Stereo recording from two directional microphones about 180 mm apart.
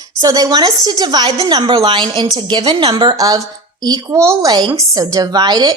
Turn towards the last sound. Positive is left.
turn(degrees=-25)  # may be behind; listen again after turning